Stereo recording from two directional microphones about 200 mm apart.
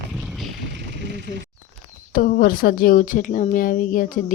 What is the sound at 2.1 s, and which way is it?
A woman's voice, 45° left (ahead or behind).